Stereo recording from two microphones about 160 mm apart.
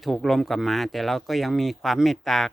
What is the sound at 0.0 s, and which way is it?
Speech, centre (ahead or behind).